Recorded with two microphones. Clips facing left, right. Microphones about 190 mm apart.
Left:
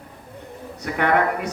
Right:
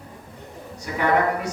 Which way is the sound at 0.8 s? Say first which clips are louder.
Left 1 dB; 60° left (ahead or behind).